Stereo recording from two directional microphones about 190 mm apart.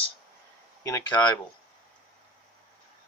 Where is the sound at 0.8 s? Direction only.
15° left (ahead or behind).